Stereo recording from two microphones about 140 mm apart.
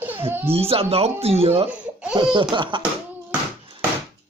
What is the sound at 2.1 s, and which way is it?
Speech, 35° right (ahead or behind).